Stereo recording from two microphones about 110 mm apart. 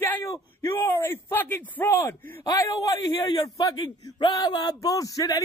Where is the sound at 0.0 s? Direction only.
20° left (ahead or behind).